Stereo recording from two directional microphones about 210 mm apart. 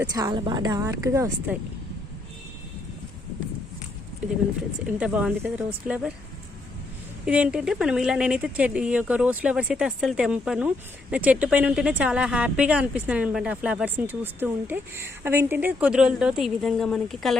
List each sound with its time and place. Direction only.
0.0 s speech: 20° right (ahead or behind)
4.9 s speech: 5° right (ahead or behind)
7.3 s speech: 5° right (ahead or behind)